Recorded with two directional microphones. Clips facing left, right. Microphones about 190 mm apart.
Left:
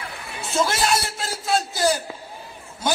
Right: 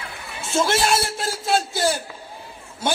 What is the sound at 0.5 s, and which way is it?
A man's voice, 25° right (ahead or behind).